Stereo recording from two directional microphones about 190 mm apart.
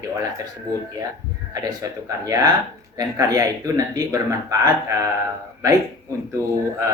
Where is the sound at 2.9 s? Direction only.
20° right (ahead or behind).